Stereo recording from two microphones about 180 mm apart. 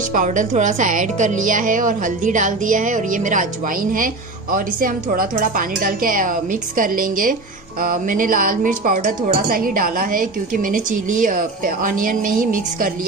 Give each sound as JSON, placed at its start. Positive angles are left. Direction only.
{"t": 0.1, "sound": "speech", "side_deg": -45}